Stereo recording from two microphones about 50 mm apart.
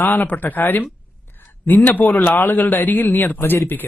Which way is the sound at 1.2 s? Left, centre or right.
Left.